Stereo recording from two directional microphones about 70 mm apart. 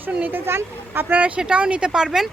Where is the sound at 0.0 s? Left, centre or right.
Right.